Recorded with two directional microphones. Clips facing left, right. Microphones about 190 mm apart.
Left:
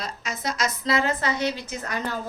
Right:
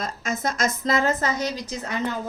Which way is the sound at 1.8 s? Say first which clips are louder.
Right 2 dB; 25° right (ahead or behind).